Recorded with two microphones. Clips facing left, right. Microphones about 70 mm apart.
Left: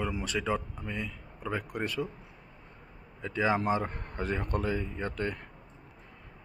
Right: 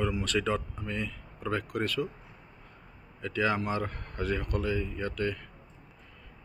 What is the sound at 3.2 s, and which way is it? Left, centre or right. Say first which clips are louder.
A man's voice: left 1 dB; left.